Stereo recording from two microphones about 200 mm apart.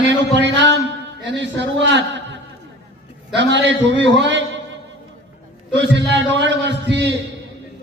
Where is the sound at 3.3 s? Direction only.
65° right (ahead or behind).